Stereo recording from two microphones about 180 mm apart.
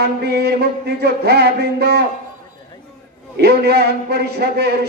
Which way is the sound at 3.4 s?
65° right (ahead or behind).